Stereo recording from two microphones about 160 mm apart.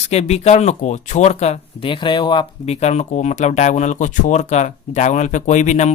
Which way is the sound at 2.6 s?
45° left (ahead or behind).